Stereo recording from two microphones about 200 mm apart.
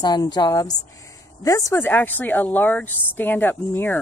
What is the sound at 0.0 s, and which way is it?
A woman's voice, 20° left (ahead or behind).